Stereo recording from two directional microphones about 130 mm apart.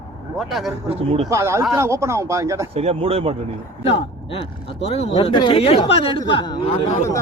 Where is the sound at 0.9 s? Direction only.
50° right (ahead or behind).